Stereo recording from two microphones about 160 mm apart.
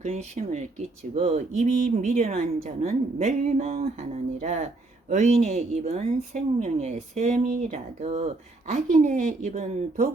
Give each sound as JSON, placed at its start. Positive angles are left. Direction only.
{"t": 0.0, "sound": "speech", "side_deg": -45}